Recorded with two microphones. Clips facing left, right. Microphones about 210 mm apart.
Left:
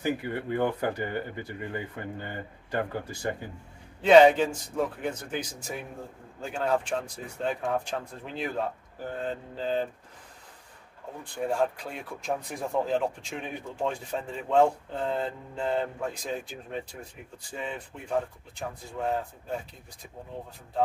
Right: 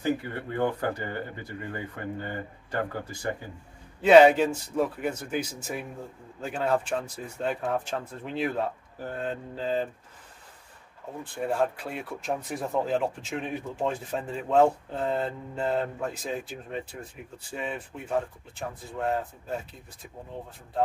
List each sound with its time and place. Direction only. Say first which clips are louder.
0.0 s speech: right 1 dB; 15° left (ahead or behind)
4.0 s a man's voice: right 1 dB; 5° right (ahead or behind)
11.3 s speech: even; centre (ahead or behind)